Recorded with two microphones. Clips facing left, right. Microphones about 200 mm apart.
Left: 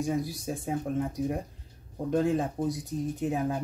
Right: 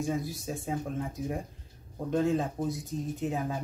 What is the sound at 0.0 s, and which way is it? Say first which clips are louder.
Speech: left 2 dB; 15° left (ahead or behind).